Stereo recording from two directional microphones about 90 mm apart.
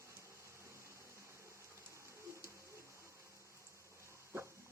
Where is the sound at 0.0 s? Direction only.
35° right (ahead or behind).